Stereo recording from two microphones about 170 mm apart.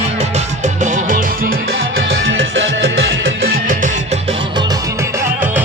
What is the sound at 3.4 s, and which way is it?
Music, 55° right (ahead or behind).